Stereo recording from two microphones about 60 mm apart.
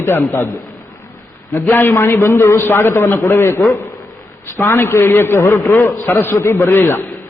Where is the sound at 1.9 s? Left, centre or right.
Left.